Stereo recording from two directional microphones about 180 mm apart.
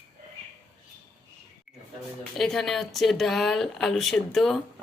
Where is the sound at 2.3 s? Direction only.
Centre (ahead or behind).